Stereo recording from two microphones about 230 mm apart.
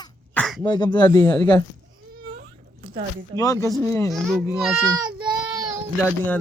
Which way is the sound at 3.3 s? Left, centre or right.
Centre.